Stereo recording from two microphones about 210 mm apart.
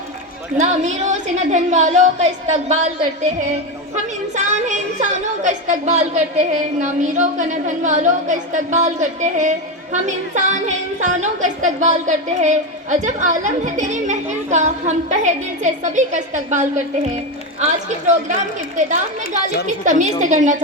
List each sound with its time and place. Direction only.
0.5 s a woman's voice: 35° right (ahead or behind)
4.4 s a woman's voice: 35° right (ahead or behind)